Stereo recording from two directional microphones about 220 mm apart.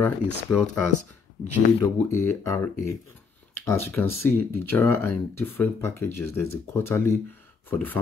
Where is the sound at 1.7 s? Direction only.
10° left (ahead or behind).